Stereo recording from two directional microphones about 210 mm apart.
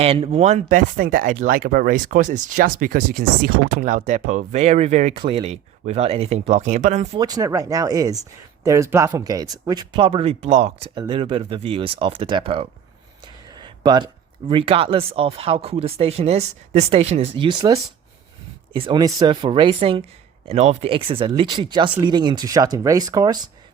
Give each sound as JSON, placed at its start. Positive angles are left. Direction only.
{"t": 0.0, "sound": "speech", "side_deg": -30}
{"t": 7.2, "sound": "speech", "side_deg": -20}